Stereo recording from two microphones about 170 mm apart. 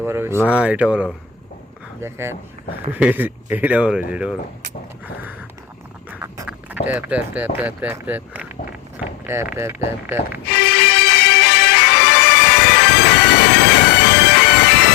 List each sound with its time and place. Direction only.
0.0 s speech: 15° right (ahead or behind)
6.1 s speech: 15° right (ahead or behind)
10.8 s music: 75° left (ahead or behind)